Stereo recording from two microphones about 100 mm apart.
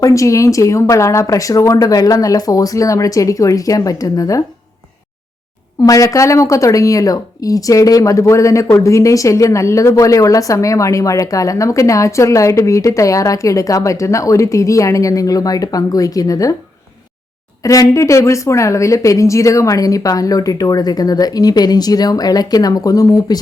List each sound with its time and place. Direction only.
0.0 s speech: 30° left (ahead or behind)
5.8 s speech: 35° left (ahead or behind)
17.6 s speech: 35° left (ahead or behind)